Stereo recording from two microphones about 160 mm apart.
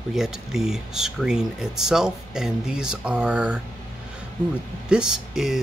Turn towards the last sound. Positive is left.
turn(degrees=-5)  # may be behind; listen again after turning